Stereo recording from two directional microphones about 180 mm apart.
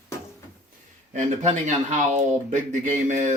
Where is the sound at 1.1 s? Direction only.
40° right (ahead or behind).